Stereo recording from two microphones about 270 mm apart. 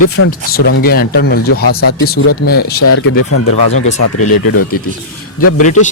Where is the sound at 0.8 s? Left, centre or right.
Left.